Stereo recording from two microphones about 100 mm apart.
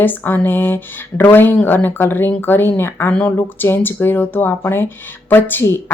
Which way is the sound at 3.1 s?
10° left (ahead or behind).